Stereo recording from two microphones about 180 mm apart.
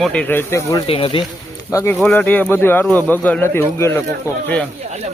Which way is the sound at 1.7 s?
15° left (ahead or behind).